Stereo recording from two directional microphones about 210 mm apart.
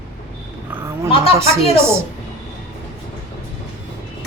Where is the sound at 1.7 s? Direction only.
10° right (ahead or behind).